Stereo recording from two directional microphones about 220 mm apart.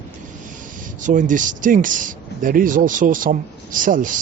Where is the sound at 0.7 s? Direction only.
35° right (ahead or behind).